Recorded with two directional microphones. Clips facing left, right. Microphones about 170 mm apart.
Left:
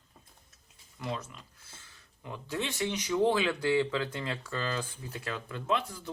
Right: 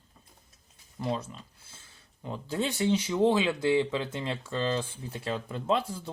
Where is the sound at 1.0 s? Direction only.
30° right (ahead or behind).